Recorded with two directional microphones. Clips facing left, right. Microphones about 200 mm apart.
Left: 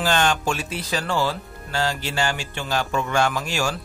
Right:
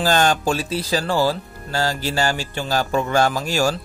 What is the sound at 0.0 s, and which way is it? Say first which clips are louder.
A man's voice: right 3 dB; 35° right (ahead or behind).